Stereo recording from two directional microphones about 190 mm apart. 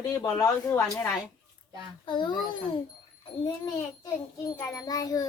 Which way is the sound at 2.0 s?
25° left (ahead or behind).